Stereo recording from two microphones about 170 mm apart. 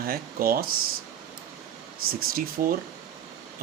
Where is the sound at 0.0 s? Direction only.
60° right (ahead or behind).